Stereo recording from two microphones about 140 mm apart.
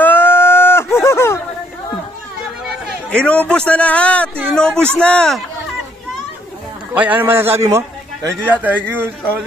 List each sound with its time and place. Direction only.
0.0 s a sound: 15° left (ahead or behind)
3.1 s a man's voice: 10° left (ahead or behind)
6.9 s a man's voice: 15° right (ahead or behind)